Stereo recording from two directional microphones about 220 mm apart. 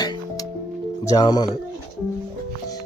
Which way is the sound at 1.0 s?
15° left (ahead or behind).